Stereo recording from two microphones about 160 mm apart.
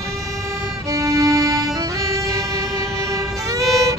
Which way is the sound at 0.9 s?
20° right (ahead or behind).